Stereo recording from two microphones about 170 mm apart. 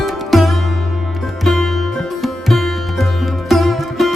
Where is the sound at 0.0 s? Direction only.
Centre (ahead or behind).